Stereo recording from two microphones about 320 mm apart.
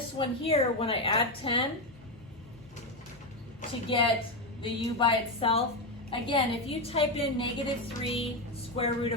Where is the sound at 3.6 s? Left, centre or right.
Centre.